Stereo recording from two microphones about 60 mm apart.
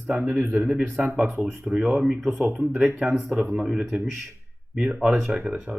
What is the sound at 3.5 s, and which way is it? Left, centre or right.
Speech, centre.